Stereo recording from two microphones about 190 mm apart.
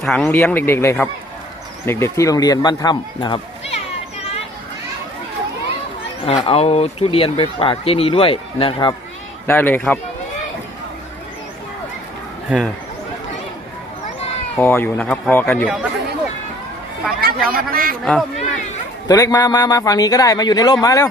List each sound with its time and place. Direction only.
0.0 s speech: centre (ahead or behind); by 3.8 s 25° left (ahead or behind)
6.2 s speech: 30° left (ahead or behind)
9.5 s speech: 10° left (ahead or behind)
12.5 s speech: 5° right (ahead or behind)
14.6 s speech: 10° left (ahead or behind)
15.6 s speech: 5° right (ahead or behind)
17.2 s speech: 50° right (ahead or behind)
18.0 s speech: 5° left (ahead or behind)
19.0 s speech: 20° left (ahead or behind)